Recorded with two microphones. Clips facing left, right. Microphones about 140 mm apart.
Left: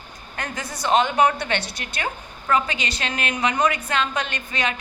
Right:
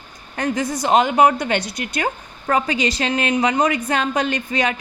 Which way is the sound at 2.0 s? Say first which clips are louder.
Right 2 dB; 35° right (ahead or behind).